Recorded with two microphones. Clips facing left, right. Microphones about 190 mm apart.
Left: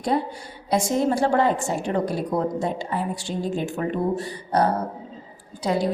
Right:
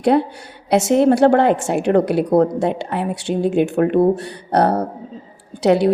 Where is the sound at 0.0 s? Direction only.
70° right (ahead or behind).